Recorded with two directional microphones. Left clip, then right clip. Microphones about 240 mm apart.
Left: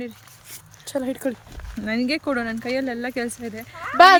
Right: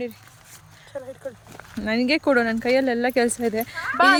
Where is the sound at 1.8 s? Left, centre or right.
Centre.